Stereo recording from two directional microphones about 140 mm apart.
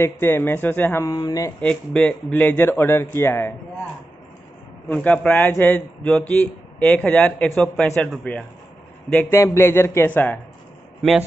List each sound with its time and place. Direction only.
0.0 s a man's voice: 15° left (ahead or behind)
1.1 s speech: 25° left (ahead or behind)
1.6 s a man's voice: 5° left (ahead or behind)
4.8 s a man's voice: 10° left (ahead or behind)
9.3 s a man's voice: 20° left (ahead or behind)